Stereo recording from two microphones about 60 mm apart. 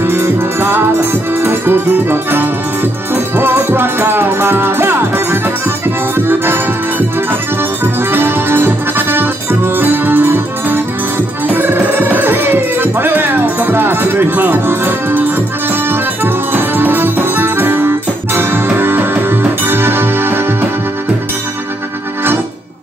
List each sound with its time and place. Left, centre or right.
0.0 s music: right